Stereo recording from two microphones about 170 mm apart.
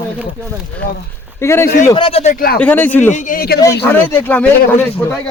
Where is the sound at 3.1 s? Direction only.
50° left (ahead or behind).